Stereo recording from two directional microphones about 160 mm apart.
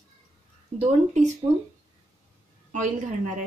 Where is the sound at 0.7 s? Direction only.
45° right (ahead or behind).